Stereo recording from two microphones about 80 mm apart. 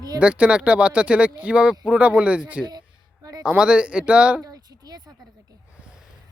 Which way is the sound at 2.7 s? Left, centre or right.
Right.